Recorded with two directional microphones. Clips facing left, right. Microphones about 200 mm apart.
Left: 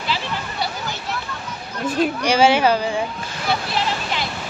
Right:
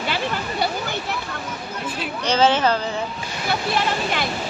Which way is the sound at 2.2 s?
10° left (ahead or behind).